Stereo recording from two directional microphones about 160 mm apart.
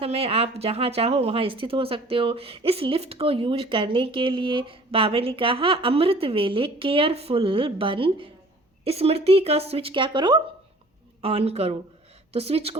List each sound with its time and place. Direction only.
0.0 s speech: 40° right (ahead or behind)